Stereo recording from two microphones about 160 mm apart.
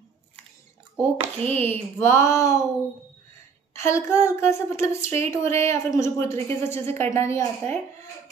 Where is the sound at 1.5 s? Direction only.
15° left (ahead or behind).